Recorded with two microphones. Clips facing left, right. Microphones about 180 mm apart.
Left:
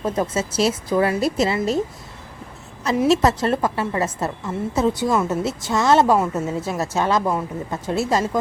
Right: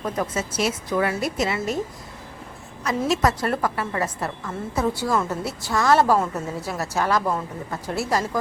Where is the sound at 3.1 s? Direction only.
25° left (ahead or behind).